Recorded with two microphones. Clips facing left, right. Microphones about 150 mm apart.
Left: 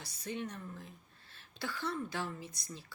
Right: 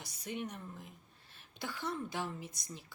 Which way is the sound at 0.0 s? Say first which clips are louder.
Left 1 dB; 15° right (ahead or behind).